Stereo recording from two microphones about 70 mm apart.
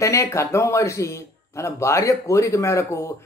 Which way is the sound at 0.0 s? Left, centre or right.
Left.